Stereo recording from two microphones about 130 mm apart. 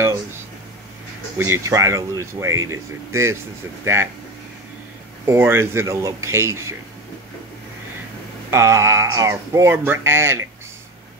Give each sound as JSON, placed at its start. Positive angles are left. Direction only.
{"t": 1.4, "sound": "speech", "side_deg": -20}
{"t": 5.2, "sound": "speech", "side_deg": -20}
{"t": 8.5, "sound": "speech", "side_deg": -20}